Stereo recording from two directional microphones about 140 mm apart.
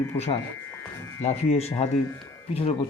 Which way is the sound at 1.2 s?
50° left (ahead or behind).